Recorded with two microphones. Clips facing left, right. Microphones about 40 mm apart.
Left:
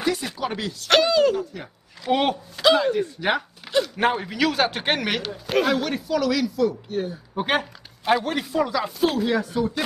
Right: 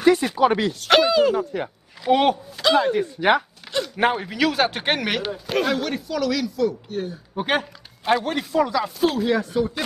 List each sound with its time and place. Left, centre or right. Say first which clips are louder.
0.0 s speech: right 8 dB; right
0.8 s speech: right 1 dB; centre
1.4 s speech: right 6 dB; right
2.0 s speech: right 4 dB; centre